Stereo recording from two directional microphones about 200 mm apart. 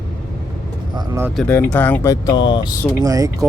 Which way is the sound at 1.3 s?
5° left (ahead or behind).